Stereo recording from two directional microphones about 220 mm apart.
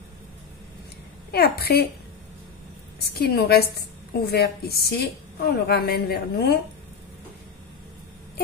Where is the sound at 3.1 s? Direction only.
45° left (ahead or behind).